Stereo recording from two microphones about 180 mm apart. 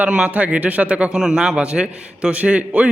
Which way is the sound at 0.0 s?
5° right (ahead or behind).